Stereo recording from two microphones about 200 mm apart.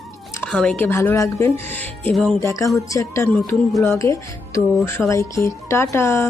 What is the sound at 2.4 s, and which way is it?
Speech, 15° left (ahead or behind).